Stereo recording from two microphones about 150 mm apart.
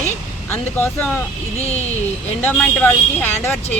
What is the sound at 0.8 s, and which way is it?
Speech, 15° left (ahead or behind).